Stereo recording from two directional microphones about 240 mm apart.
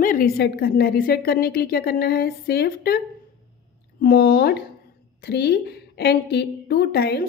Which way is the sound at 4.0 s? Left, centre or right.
Left.